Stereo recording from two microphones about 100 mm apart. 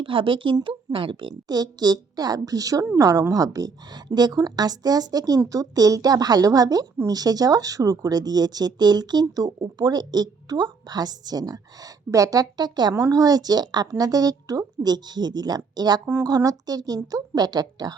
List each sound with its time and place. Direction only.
0.0 s speech: 60° right (ahead or behind)
12.9 s speech: 35° right (ahead or behind)